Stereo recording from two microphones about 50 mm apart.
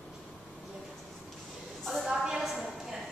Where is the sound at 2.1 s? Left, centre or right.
Centre.